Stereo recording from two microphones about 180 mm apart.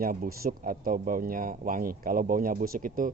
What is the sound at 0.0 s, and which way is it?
Speech, 55° right (ahead or behind).